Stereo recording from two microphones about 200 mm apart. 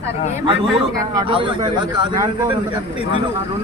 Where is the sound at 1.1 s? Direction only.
25° right (ahead or behind).